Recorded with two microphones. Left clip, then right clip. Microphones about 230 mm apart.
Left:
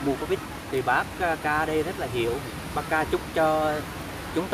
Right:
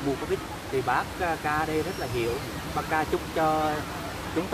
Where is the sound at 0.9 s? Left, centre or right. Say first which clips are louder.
Left 3 dB; left.